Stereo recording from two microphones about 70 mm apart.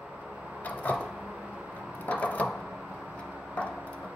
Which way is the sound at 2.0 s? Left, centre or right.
Left.